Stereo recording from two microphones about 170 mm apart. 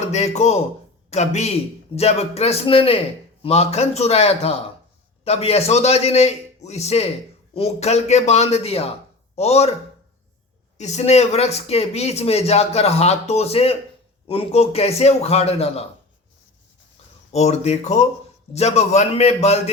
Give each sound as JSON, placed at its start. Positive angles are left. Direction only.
{"t": 0.1, "sound": "speech", "side_deg": 40}
{"t": 10.8, "sound": "speech", "side_deg": 40}
{"t": 17.3, "sound": "speech", "side_deg": 40}